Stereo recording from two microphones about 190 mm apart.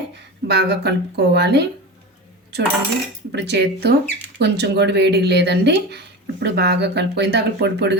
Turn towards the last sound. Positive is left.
turn(degrees=-65)  # may be behind; listen again after turning